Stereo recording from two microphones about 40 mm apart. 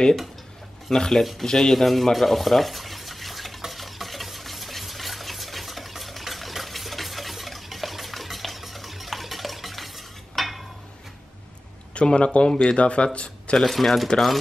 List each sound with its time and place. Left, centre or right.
0.8 s speech: centre
2.1 s stir: centre
11.9 s speech: left
13.6 s speech: centre